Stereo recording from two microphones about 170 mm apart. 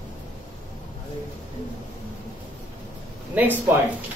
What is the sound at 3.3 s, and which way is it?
Speech, 10° right (ahead or behind).